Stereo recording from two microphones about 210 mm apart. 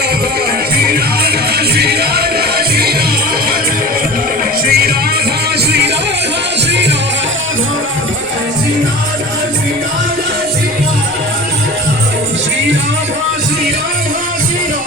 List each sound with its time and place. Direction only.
0.9 s music: 50° right (ahead or behind)
4.6 s music: 45° right (ahead or behind)